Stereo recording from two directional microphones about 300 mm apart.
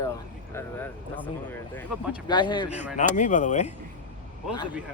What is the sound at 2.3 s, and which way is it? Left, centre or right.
Speech, centre.